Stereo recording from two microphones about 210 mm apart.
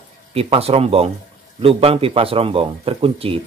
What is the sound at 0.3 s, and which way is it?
Speech, 30° right (ahead or behind).